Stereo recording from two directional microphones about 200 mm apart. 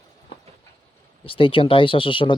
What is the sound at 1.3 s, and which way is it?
Speech, 25° left (ahead or behind).